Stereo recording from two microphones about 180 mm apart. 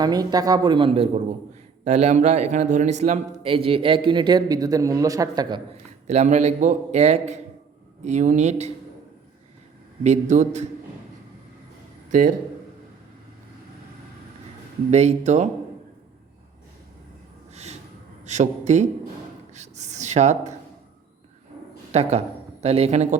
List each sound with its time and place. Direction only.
0.0 s a man's voice: 20° right (ahead or behind)
6.1 s a man's voice: 40° right (ahead or behind)
10.0 s a man's voice: 40° right (ahead or behind)
14.8 s a man's voice: 40° right (ahead or behind)
17.5 s gasp: 40° right (ahead or behind)
18.3 s a man's voice: 40° right (ahead or behind)
19.5 s a sound: 40° right (ahead or behind)
21.9 s a man's voice: 35° right (ahead or behind)